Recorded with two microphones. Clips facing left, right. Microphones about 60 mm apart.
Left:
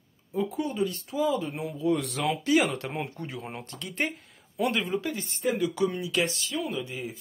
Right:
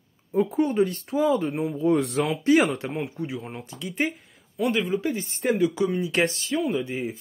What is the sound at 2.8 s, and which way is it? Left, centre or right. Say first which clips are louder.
Speech: right 4 dB; centre.